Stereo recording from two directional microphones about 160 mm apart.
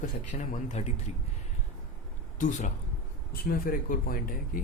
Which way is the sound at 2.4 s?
50° left (ahead or behind).